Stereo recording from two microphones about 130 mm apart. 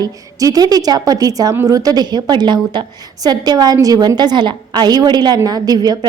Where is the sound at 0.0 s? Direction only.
25° right (ahead or behind).